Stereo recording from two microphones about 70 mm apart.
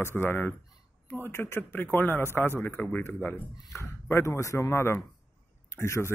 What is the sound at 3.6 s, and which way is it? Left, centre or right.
A man's voice, left.